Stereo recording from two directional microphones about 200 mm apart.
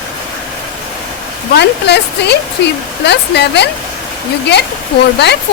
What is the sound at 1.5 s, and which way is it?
Speech, 55° left (ahead or behind).